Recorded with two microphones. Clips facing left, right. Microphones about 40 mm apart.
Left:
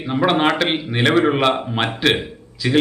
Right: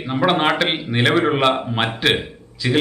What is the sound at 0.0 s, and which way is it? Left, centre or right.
A man's voice, centre.